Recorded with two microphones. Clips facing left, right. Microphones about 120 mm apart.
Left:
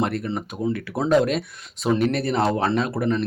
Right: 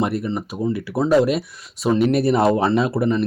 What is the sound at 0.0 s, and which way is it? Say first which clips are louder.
Speech: right 3 dB; 5° right (ahead or behind).